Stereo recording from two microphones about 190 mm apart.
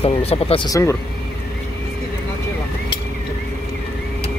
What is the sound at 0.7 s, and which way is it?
Speech, 15° left (ahead or behind).